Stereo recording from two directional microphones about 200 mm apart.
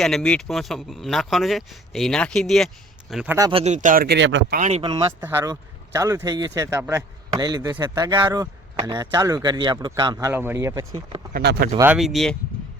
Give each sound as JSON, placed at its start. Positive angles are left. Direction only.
{"t": 0.0, "sound": "speech", "side_deg": 5}
{"t": 3.3, "sound": "speech", "side_deg": -20}
{"t": 3.6, "sound": "speech", "side_deg": -35}
{"t": 4.6, "sound": "speech", "side_deg": -30}
{"t": 5.2, "sound": "speech", "side_deg": -10}
{"t": 11.3, "sound": "speech", "side_deg": -50}
{"t": 11.8, "sound": "speech", "side_deg": -5}